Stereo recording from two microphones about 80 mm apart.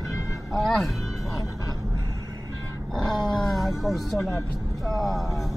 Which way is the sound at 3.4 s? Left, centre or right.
Centre.